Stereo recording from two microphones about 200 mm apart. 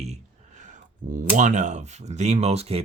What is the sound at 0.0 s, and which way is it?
Speech, 35° right (ahead or behind).